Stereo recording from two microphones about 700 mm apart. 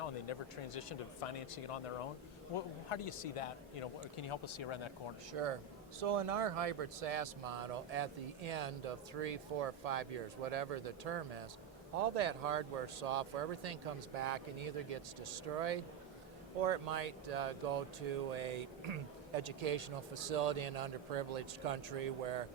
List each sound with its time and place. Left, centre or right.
0.0 s a man's voice: left
5.3 s a man's voice: right